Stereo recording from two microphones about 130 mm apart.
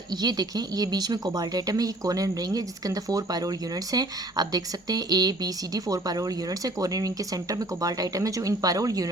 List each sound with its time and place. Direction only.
0.2 s speech: 30° right (ahead or behind)